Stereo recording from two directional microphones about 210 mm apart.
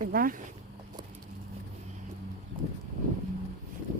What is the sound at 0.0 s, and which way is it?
Speech, 40° right (ahead or behind).